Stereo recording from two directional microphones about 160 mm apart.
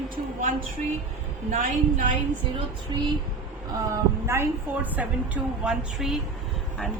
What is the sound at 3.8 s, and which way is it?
Speech, 15° right (ahead or behind).